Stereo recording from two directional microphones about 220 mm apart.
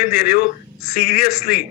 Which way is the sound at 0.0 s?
45° left (ahead or behind).